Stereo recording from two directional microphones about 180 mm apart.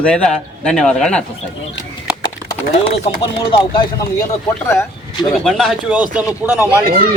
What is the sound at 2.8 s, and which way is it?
Speech, 35° left (ahead or behind).